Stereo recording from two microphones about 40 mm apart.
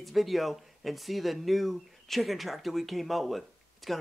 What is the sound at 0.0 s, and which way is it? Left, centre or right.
Speech, centre.